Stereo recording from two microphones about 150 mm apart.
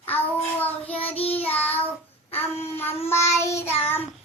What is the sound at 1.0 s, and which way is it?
Child singing, 40° left (ahead or behind).